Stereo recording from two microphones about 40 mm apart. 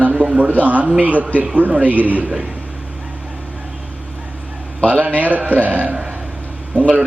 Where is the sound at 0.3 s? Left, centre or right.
Right.